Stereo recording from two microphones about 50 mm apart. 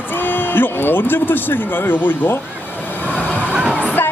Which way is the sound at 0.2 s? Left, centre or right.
Left.